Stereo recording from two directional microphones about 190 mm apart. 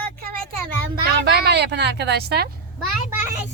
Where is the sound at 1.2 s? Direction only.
60° right (ahead or behind).